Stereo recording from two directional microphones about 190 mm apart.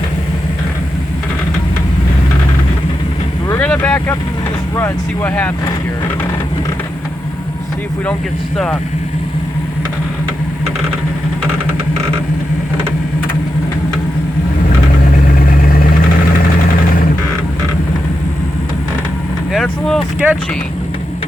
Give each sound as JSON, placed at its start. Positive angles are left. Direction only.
{"t": 3.5, "sound": "vehicle", "side_deg": 10}
{"t": 4.8, "sound": "speech", "side_deg": 10}
{"t": 15.0, "sound": "vehicle", "side_deg": 45}
{"t": 19.5, "sound": "speech", "side_deg": 0}